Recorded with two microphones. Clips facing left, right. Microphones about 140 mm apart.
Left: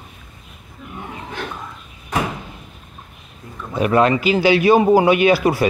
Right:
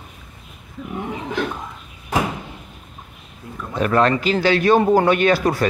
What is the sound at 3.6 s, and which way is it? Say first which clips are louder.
A man's voice: left 2 dB; 10° left (ahead or behind).